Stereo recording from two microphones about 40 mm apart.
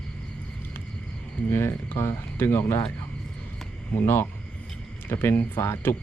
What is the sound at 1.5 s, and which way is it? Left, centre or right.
Speech, left.